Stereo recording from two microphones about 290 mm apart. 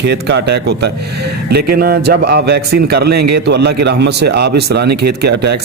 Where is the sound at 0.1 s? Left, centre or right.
Right.